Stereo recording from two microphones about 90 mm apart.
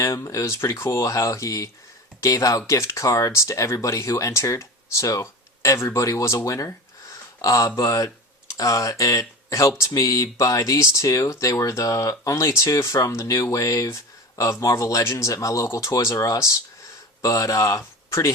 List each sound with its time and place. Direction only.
0.0 s speech: 35° left (ahead or behind)